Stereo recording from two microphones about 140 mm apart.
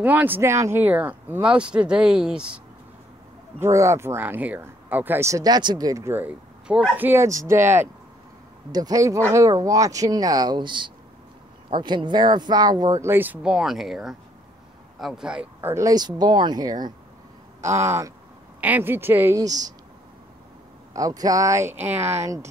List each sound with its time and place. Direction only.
0.0 s speech: 10° right (ahead or behind)
3.5 s speech: 20° right (ahead or behind)
15.7 s speech: 25° right (ahead or behind)
20.9 s speech: 25° right (ahead or behind)